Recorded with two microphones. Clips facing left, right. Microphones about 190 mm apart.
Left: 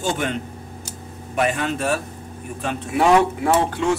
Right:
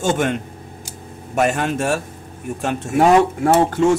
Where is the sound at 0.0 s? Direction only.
50° right (ahead or behind).